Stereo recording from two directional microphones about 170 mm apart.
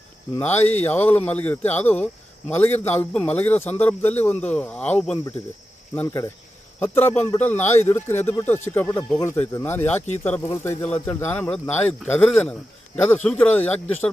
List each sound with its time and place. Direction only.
0.3 s a man's voice: 10° left (ahead or behind)